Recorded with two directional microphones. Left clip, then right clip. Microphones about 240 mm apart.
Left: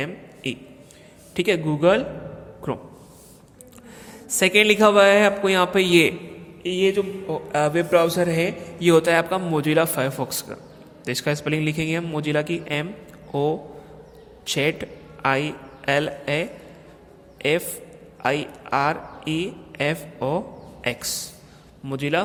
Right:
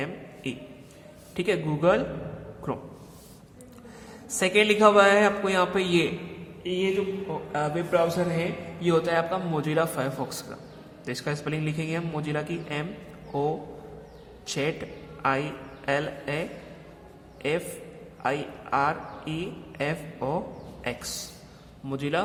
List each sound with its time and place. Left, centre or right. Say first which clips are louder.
0.4 s a man's voice: left 6 dB; left
4.4 s a man's voice: left 5 dB; left
6.7 s a man's voice: left 6 dB; left